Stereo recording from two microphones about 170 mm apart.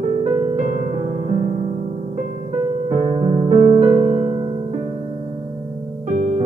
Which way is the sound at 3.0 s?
40° right (ahead or behind).